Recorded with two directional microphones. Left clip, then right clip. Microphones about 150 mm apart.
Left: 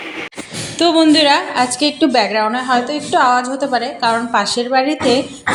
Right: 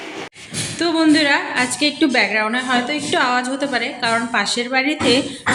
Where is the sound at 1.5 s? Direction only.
10° left (ahead or behind).